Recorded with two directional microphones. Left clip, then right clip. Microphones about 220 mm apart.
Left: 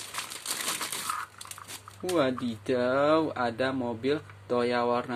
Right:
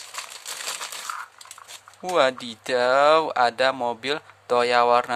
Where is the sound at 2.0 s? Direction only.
35° right (ahead or behind).